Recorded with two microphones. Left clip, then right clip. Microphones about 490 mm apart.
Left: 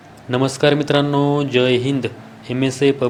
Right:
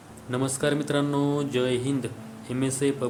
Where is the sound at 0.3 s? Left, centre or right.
Right.